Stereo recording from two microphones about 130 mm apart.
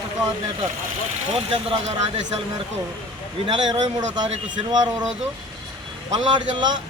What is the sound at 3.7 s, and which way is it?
Speech, 35° right (ahead or behind).